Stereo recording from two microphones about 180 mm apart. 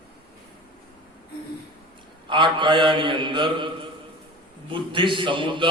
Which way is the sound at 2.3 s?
25° right (ahead or behind).